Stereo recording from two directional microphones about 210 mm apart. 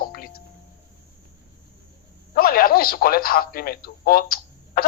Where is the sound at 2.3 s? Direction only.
45° left (ahead or behind).